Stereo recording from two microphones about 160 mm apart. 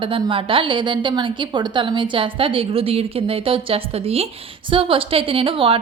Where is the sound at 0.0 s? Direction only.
35° right (ahead or behind).